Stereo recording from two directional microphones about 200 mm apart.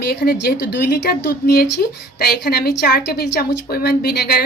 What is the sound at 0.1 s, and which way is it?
Speech, 50° left (ahead or behind).